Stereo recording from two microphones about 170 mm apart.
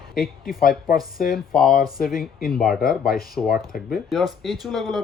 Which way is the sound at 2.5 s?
Centre (ahead or behind).